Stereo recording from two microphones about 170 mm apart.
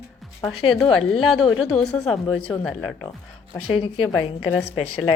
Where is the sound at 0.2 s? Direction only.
Centre (ahead or behind).